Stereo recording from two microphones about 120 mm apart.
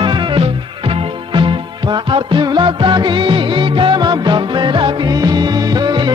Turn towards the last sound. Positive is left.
turn(degrees=-40)  # may be behind; listen again after turning